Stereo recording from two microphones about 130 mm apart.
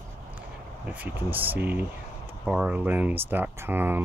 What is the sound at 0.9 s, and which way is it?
Speech, 15° right (ahead or behind).